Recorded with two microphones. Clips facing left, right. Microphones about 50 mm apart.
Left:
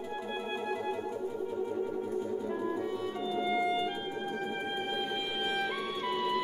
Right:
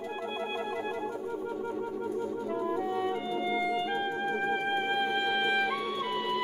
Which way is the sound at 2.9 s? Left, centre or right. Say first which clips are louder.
Right 4 dB; right.